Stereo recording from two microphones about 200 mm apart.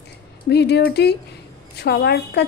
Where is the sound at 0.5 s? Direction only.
55° left (ahead or behind).